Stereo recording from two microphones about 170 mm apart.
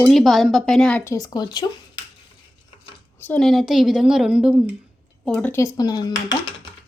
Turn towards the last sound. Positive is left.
turn(degrees=25)  # may be behind; listen again after turning